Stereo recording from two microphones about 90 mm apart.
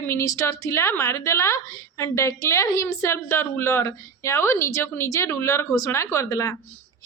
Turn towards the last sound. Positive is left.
turn(degrees=35)  # may be behind; listen again after turning